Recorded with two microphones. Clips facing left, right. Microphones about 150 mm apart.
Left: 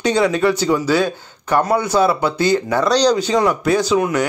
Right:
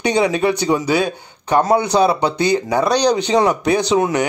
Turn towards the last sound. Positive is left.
turn(degrees=-20)  # may be behind; listen again after turning